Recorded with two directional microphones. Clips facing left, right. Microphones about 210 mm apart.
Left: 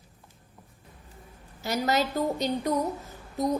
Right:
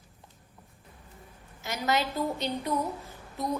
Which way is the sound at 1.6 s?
35° left (ahead or behind).